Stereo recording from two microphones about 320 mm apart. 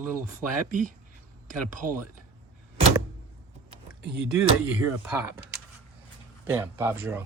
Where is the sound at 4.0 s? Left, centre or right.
Right.